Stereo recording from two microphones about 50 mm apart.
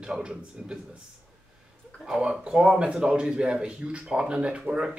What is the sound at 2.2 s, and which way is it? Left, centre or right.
Speech, centre.